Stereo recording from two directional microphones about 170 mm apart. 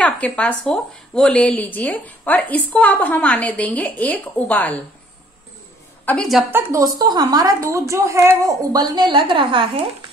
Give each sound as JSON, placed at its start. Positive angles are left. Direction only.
{"t": 0.0, "sound": "speech", "side_deg": 10}
{"t": 6.0, "sound": "a woman's voice", "side_deg": 5}
{"t": 6.5, "sound": "a woman's voice", "side_deg": -20}